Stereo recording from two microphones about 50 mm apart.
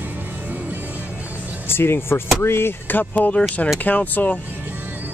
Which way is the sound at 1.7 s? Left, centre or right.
Left.